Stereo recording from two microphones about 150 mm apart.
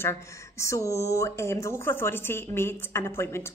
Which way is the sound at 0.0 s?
20° left (ahead or behind).